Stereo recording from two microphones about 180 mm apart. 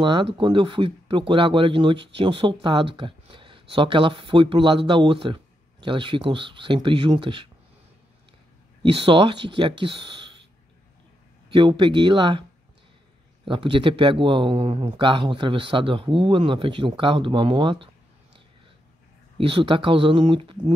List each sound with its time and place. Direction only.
0.0 s speech: 25° right (ahead or behind)
8.8 s speech: 30° right (ahead or behind)
11.5 s speech: 25° right (ahead or behind)
13.5 s speech: 30° right (ahead or behind)
19.3 s speech: 30° right (ahead or behind)